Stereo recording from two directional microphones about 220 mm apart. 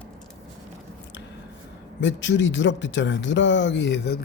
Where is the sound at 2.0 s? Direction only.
55° left (ahead or behind).